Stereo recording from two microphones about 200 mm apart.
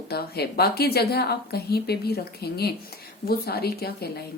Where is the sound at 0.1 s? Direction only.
50° left (ahead or behind).